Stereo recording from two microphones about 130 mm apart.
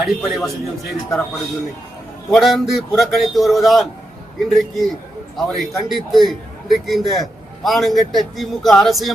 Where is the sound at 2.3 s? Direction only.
Centre (ahead or behind).